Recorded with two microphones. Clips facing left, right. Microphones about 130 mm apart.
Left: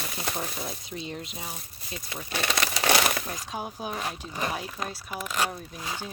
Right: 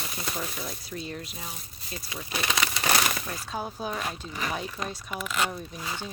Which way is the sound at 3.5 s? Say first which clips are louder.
Right 2 dB; 10° left (ahead or behind).